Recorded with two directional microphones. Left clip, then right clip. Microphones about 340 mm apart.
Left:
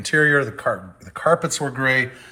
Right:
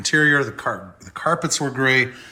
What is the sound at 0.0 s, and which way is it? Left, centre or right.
Speech, centre.